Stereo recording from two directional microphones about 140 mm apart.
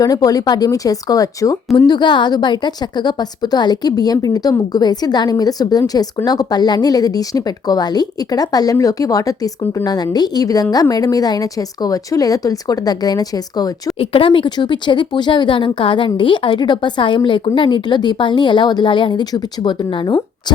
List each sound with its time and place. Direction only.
0.0 s speech: 25° left (ahead or behind)
14.0 s speech: 40° left (ahead or behind)